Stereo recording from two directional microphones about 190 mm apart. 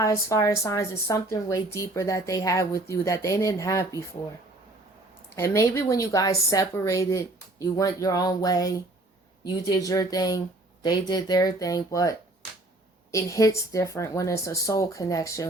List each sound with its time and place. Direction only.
0.0 s a woman's voice: 15° left (ahead or behind)
5.3 s a woman's voice: 15° left (ahead or behind)